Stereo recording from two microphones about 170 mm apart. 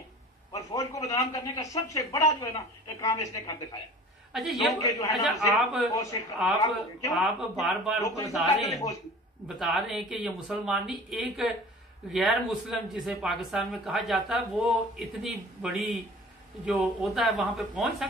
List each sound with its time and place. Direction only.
0.5 s a man's voice: 20° left (ahead or behind)
4.3 s speech: centre (ahead or behind)
4.7 s a man's voice: 20° left (ahead or behind)
5.1 s speech: centre (ahead or behind)
5.9 s a man's voice: 20° left (ahead or behind)
7.2 s speech: centre (ahead or behind)